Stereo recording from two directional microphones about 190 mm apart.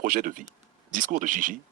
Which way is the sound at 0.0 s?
45° right (ahead or behind).